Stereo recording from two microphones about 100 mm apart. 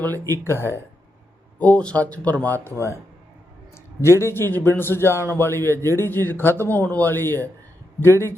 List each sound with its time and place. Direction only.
0.0 s speech: 20° left (ahead or behind)
1.5 s speech: 15° left (ahead or behind)
4.0 s speech: 25° left (ahead or behind)